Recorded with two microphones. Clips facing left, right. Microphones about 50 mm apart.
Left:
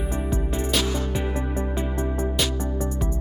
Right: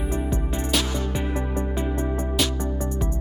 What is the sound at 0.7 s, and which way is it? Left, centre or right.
Music, centre.